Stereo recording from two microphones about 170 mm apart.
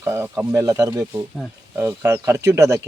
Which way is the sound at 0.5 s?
20° right (ahead or behind).